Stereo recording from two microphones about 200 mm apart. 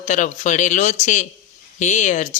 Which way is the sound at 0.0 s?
40° left (ahead or behind).